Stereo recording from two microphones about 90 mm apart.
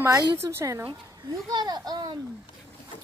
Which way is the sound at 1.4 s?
50° right (ahead or behind).